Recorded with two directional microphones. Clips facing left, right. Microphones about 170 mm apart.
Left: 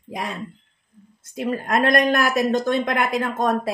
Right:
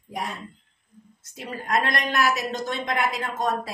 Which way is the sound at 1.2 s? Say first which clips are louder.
Left 10 dB; 55° left (ahead or behind).